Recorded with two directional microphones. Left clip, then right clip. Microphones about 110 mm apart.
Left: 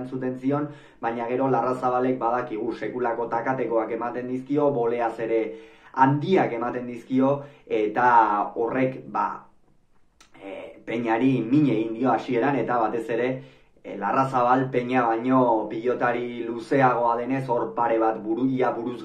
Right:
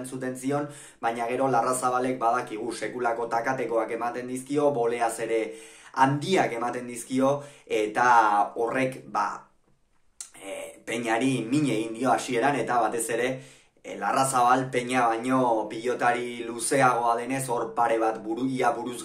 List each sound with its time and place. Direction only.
0.2 s speech: 20° right (ahead or behind)
10.4 s speech: 20° right (ahead or behind)